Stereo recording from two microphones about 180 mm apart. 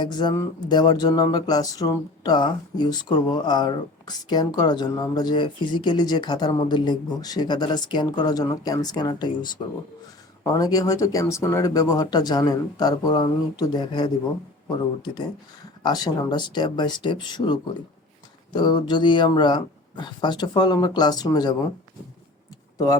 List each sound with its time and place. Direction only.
0.0 s speech: 25° left (ahead or behind)
15.8 s speech: 25° left (ahead or behind)